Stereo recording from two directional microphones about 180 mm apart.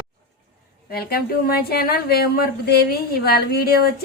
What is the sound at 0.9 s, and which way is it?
Speech, 60° left (ahead or behind).